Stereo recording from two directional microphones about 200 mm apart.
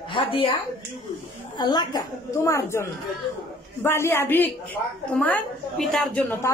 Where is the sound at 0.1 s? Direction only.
25° left (ahead or behind).